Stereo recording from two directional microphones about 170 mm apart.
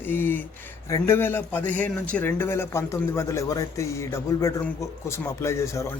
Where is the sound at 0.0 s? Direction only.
10° left (ahead or behind).